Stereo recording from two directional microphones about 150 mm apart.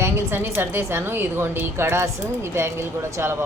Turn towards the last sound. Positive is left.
turn(degrees=-15)  # may be behind; listen again after turning